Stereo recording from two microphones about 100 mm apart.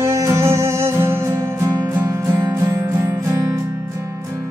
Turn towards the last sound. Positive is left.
turn(degrees=-30)  # may be behind; listen again after turning